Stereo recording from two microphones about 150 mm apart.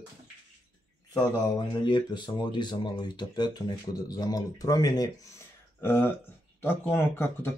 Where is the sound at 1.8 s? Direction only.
30° left (ahead or behind).